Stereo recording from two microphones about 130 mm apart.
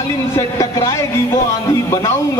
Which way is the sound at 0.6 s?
25° left (ahead or behind).